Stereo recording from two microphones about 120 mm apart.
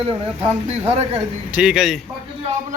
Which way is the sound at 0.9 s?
60° right (ahead or behind).